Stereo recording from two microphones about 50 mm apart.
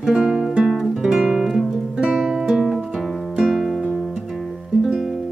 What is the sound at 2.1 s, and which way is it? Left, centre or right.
Music, centre.